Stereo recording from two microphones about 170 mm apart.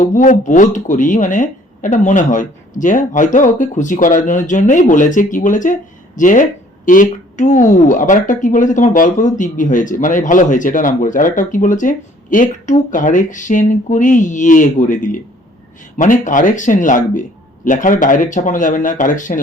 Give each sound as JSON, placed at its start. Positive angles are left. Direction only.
{"t": 0.0, "sound": "speech", "side_deg": 50}